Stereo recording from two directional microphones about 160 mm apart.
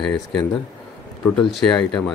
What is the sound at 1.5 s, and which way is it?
Speech, 5° left (ahead or behind).